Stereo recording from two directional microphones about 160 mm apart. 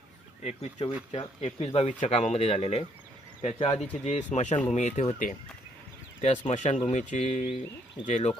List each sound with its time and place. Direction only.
0.8 s speech: 40° left (ahead or behind)